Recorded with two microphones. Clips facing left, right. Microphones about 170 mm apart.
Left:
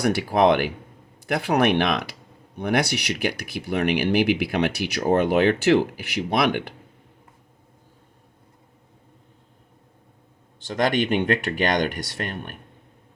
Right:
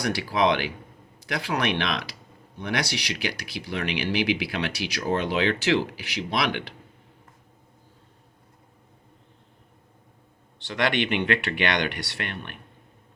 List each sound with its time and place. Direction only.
0.0 s speech: 55° left (ahead or behind)
10.7 s speech: 45° left (ahead or behind)